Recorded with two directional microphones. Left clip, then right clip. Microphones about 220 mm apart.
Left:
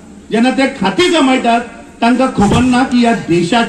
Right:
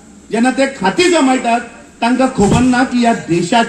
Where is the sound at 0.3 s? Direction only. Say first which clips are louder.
Left 1 dB; 35° right (ahead or behind).